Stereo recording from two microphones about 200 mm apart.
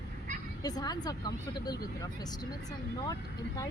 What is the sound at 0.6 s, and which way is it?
Speech, 20° left (ahead or behind).